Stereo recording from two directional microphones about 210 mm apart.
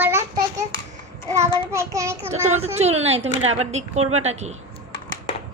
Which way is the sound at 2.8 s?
30° right (ahead or behind).